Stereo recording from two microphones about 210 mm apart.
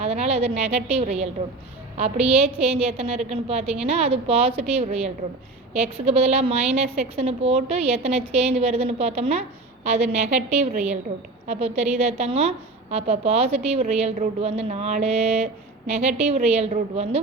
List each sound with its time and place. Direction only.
0.0 s a woman's voice: 30° right (ahead or behind)